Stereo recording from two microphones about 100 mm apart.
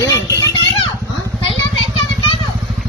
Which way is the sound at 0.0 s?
35° left (ahead or behind).